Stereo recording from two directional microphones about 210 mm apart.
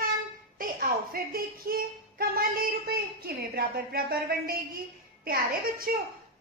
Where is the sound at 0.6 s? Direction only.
45° right (ahead or behind).